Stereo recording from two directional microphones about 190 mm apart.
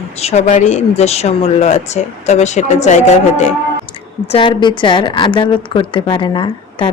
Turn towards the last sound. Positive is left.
turn(degrees=25)  # may be behind; listen again after turning